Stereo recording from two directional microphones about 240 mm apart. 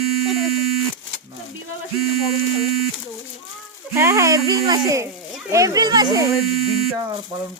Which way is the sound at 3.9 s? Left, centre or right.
Centre.